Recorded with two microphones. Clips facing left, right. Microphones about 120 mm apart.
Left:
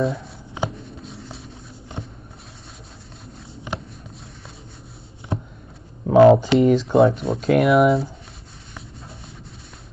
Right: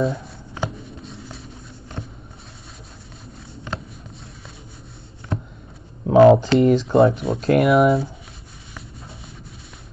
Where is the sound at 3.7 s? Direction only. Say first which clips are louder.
Left 1 dB; 15° left (ahead or behind).